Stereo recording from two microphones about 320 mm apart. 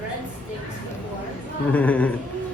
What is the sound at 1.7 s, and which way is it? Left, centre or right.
Speech, centre.